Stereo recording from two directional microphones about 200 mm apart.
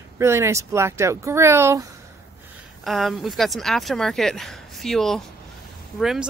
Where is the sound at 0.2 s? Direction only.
15° right (ahead or behind).